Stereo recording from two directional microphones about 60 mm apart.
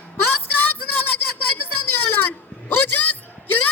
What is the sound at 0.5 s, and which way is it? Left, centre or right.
Child singing, left.